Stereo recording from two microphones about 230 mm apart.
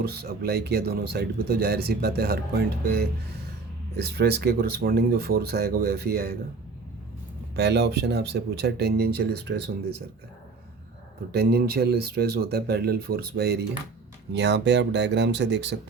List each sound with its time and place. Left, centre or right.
0.1 s speech: right
4.1 s speech: right
7.5 s speech: right
11.3 s speech: right